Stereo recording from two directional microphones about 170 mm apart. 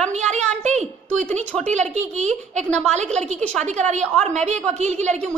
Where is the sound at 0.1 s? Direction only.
40° right (ahead or behind).